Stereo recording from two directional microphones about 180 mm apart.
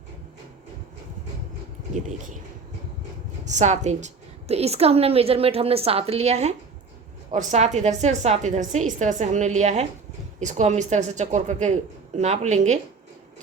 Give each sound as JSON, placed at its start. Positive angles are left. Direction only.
{"t": 1.9, "sound": "speech", "side_deg": -45}
{"t": 3.4, "sound": "a woman's voice", "side_deg": -40}